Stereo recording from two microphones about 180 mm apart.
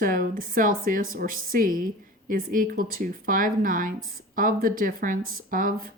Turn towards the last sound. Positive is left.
turn(degrees=-50)  # may be behind; listen again after turning